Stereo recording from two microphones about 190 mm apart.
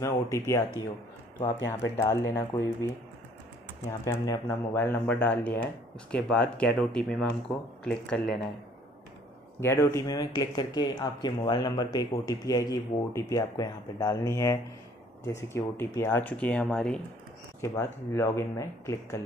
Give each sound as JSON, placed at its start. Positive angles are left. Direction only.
{"t": 0.0, "sound": "speech", "side_deg": 15}
{"t": 1.7, "sound": "speech", "side_deg": 15}
{"t": 4.0, "sound": "speech", "side_deg": 15}
{"t": 9.6, "sound": "speech", "side_deg": 15}